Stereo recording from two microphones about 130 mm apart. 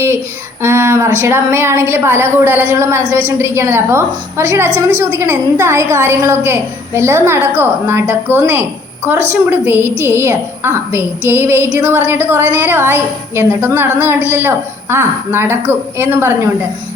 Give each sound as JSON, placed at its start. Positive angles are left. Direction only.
{"t": 0.6, "sound": "a woman's voice", "side_deg": -20}